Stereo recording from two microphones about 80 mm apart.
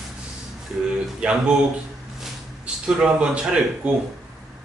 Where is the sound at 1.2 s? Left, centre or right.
Centre.